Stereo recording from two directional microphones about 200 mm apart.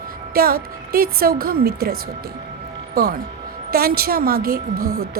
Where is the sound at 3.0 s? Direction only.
50° right (ahead or behind).